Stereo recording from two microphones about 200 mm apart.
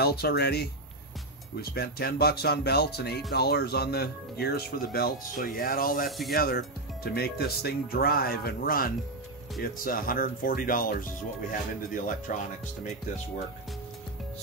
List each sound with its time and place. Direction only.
0.0 s speech: 50° left (ahead or behind)
6.0 s speech: centre (ahead or behind)
6.3 s speech: 50° left (ahead or behind)